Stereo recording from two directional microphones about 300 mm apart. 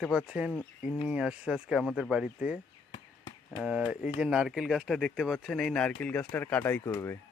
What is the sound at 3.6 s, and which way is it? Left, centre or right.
Speech, centre.